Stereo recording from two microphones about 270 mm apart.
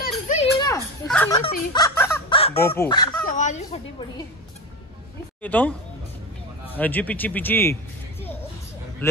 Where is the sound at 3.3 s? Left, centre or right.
Left.